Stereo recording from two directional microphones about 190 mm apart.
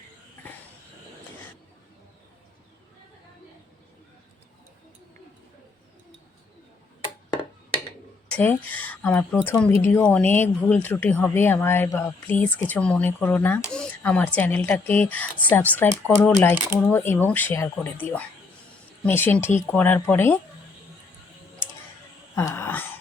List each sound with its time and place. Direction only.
8.3 s speech: 10° left (ahead or behind)
18.0 s speech: 30° right (ahead or behind)
19.0 s speech: 10° left (ahead or behind)
22.4 s a sound: 10° left (ahead or behind)